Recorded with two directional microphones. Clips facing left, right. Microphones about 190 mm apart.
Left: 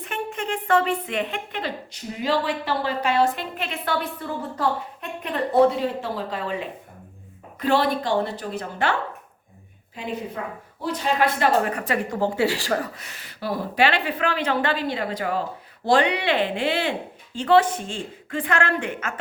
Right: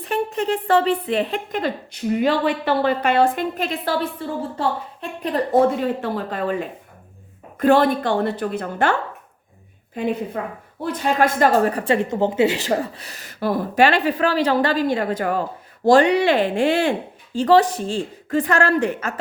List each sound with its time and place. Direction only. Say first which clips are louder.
0.0 s a woman's voice: right 7 dB; 35° right (ahead or behind)
1.9 s speech: right 6 dB; 60° right (ahead or behind); by 5.6 s 35° right (ahead or behind)
5.6 s a woman's voice: right 2 dB; 55° right (ahead or behind); by 19.2 s 35° right (ahead or behind)